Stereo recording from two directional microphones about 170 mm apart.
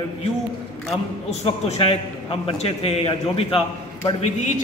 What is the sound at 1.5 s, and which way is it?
A man's voice, 35° left (ahead or behind).